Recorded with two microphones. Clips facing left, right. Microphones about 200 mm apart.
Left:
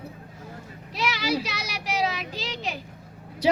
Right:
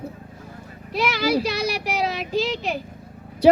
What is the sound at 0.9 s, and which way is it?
Speech, 55° right (ahead or behind).